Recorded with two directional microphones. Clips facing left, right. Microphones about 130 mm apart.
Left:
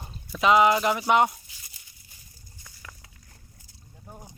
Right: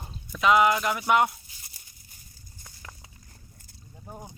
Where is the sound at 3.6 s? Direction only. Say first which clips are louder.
Right 3 dB; 50° right (ahead or behind).